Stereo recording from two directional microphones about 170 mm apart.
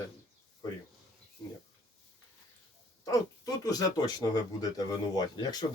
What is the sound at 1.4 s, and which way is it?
Speech, 10° left (ahead or behind).